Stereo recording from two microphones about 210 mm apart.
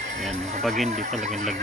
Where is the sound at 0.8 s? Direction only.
35° right (ahead or behind).